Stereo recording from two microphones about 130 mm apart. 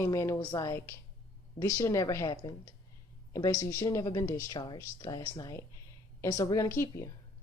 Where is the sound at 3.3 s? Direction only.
25° left (ahead or behind).